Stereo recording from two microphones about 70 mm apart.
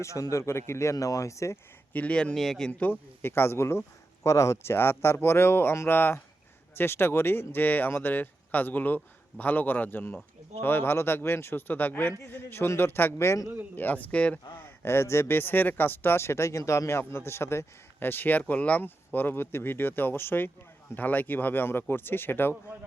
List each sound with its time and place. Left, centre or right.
0.0 s speech: left
1.9 s speech: centre
2.3 s speech: centre
2.7 s speech: left
4.5 s speech: left
13.7 s speech: left
14.5 s speech: left